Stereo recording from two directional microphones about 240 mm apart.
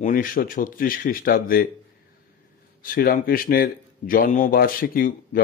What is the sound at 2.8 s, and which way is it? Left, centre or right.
A man's voice, left.